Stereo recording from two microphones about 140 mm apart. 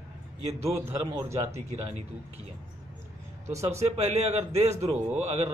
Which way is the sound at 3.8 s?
50° right (ahead or behind).